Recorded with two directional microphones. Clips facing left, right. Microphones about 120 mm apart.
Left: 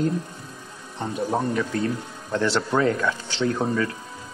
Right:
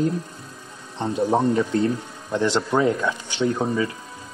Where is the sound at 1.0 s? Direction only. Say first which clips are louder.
Right 5 dB; 25° right (ahead or behind).